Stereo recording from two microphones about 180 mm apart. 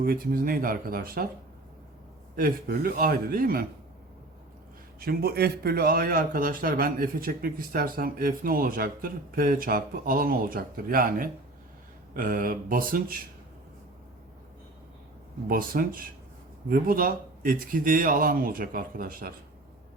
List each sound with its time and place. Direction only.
0.0 s a man's voice: 55° right (ahead or behind)
2.3 s a man's voice: 55° right (ahead or behind)
4.9 s a man's voice: 60° right (ahead or behind)
15.4 s a man's voice: 50° right (ahead or behind)